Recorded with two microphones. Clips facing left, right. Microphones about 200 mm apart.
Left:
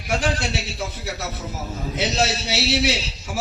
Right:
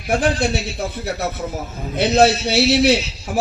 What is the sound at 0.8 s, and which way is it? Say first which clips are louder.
Speech: right 4 dB; 55° right (ahead or behind).